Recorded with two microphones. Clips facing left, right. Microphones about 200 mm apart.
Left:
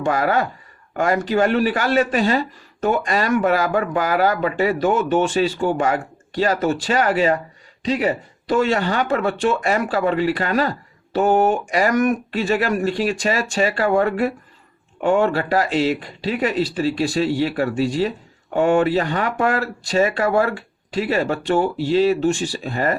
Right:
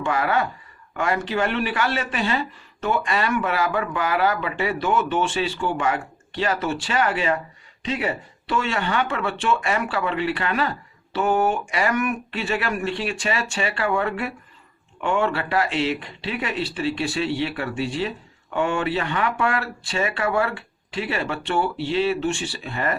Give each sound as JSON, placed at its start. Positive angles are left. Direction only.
{"t": 0.0, "sound": "speech", "side_deg": 40}